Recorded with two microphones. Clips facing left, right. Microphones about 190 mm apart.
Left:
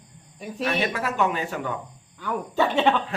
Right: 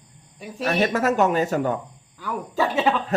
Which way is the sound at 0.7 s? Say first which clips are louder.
Right 6 dB; 45° right (ahead or behind).